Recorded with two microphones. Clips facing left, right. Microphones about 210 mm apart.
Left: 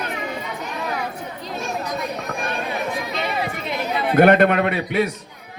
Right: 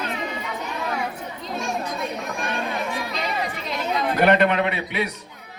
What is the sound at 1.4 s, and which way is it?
Chatter, centre (ahead or behind).